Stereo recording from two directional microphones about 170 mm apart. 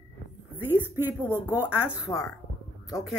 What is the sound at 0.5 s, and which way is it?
A woman's voice, 15° right (ahead or behind).